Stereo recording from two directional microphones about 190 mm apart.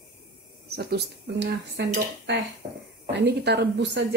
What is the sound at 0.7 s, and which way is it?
Speech, 60° right (ahead or behind).